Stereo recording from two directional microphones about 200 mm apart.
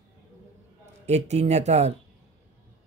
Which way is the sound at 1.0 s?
35° right (ahead or behind).